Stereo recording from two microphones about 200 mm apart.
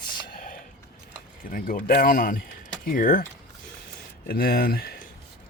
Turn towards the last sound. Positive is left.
turn(degrees=50)  # may be behind; listen again after turning